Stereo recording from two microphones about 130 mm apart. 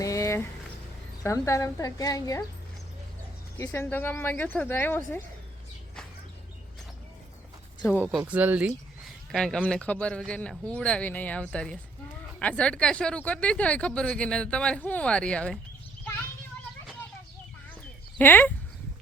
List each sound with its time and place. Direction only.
0.0 s a sound: 25° left (ahead or behind)
1.2 s a woman's voice: 25° left (ahead or behind)
3.6 s speech: 20° left (ahead or behind)
8.2 s speech: 15° right (ahead or behind)
9.3 s speech: 5° left (ahead or behind)
18.2 s speech: 15° left (ahead or behind)